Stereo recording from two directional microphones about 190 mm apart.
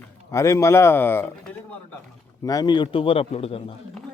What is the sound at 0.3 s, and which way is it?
Speech, 15° left (ahead or behind).